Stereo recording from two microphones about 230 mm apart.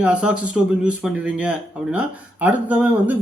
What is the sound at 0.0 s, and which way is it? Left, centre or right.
Speech, centre.